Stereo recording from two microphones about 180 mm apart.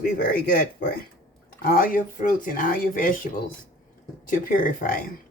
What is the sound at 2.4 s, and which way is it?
Speech, 50° left (ahead or behind).